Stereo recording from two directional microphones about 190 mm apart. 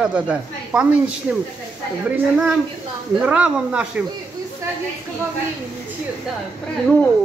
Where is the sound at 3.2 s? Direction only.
5° right (ahead or behind).